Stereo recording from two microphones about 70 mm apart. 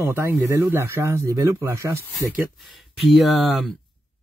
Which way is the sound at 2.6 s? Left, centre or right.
Centre.